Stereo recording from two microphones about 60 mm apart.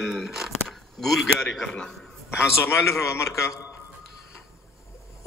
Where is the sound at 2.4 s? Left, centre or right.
Left.